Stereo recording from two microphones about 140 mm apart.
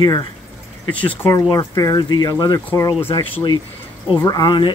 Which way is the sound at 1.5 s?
30° left (ahead or behind).